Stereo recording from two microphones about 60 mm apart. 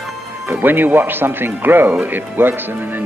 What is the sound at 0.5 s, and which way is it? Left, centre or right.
Speech, right.